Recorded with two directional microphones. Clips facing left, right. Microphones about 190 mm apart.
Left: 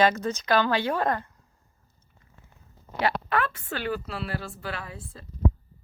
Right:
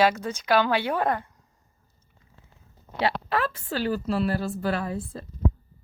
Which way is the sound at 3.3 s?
30° right (ahead or behind).